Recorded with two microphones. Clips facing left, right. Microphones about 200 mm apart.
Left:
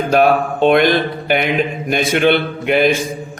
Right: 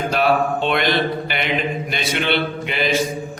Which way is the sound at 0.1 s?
50° left (ahead or behind).